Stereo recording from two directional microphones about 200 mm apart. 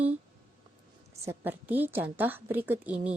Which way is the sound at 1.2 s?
10° right (ahead or behind).